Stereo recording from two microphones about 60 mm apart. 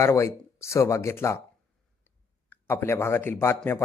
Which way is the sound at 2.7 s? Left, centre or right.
Left.